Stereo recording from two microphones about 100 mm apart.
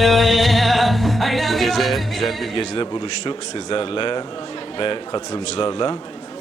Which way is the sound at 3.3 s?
60° left (ahead or behind).